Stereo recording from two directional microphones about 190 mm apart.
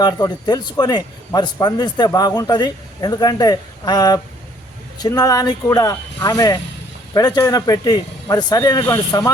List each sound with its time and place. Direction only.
0.0 s a man's voice: 20° left (ahead or behind)